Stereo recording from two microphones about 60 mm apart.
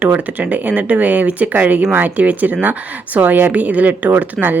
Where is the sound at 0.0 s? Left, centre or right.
Right.